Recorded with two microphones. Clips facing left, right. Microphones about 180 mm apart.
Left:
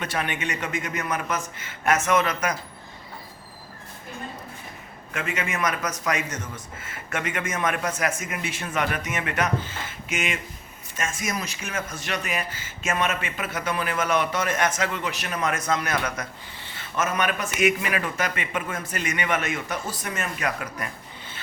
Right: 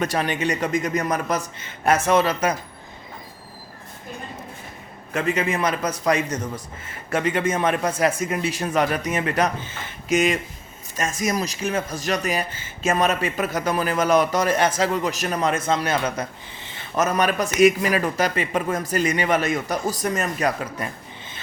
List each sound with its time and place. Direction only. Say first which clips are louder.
0.0 s speech: right 6 dB; 40° right (ahead or behind)
5.1 s speech: right 7 dB; 35° right (ahead or behind)